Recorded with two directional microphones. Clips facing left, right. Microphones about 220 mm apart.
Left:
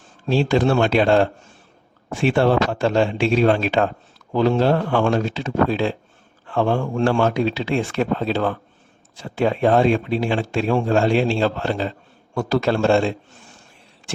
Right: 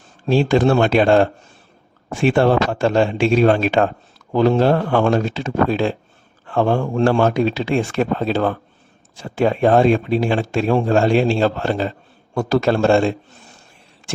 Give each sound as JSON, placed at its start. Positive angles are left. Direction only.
{"t": 0.3, "sound": "speech", "side_deg": -50}